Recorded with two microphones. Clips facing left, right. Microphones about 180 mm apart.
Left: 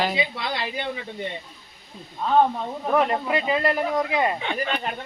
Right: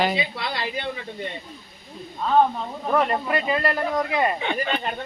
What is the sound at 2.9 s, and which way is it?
Speech, 20° left (ahead or behind).